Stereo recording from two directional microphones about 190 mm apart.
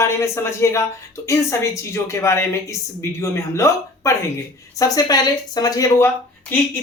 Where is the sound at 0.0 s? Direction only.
15° left (ahead or behind).